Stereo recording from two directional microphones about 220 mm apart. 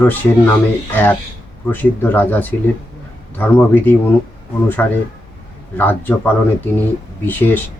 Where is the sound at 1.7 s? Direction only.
10° left (ahead or behind).